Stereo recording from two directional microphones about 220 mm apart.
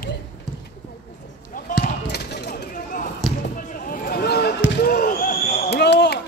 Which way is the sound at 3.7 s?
40° left (ahead or behind).